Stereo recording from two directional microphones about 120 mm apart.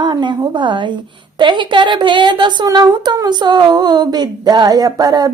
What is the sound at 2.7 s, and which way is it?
Speech, 30° right (ahead or behind).